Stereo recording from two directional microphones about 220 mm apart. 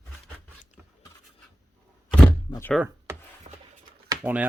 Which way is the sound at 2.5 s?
10° left (ahead or behind).